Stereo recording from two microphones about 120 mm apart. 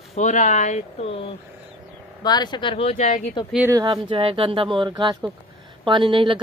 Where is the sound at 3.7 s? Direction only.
40° right (ahead or behind).